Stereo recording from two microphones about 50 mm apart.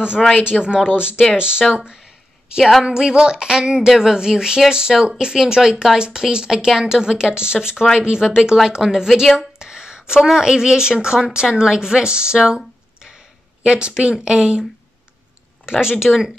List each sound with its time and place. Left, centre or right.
0.4 s a woman's voice: centre